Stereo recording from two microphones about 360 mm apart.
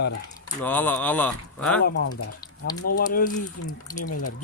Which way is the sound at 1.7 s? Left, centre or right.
Left.